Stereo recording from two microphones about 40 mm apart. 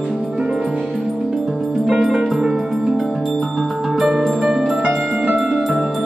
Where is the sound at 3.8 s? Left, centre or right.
Centre.